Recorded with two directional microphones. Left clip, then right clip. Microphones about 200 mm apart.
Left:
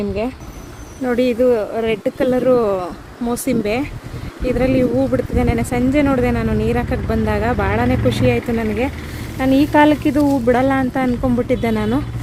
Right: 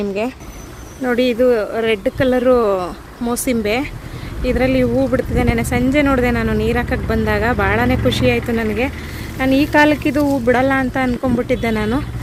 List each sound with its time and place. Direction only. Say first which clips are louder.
0.0 s speech: right 1 dB; centre (ahead or behind)